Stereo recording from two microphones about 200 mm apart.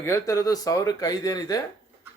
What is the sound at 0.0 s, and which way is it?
Speech, 15° left (ahead or behind).